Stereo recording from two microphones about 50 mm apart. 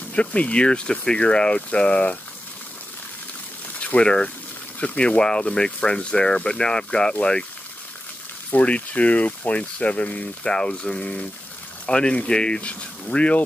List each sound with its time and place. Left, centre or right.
0.1 s speech: left
3.8 s speech: left
8.5 s speech: left